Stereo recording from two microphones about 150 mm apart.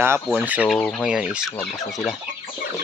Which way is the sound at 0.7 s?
10° left (ahead or behind).